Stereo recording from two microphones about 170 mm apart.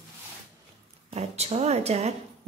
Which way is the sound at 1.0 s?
40° right (ahead or behind).